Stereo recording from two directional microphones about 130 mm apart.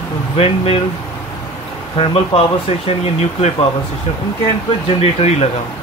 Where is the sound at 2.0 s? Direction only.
45° left (ahead or behind).